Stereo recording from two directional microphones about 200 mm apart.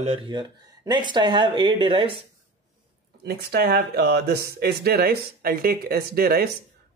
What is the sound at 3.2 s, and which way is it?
Speech, 55° right (ahead or behind).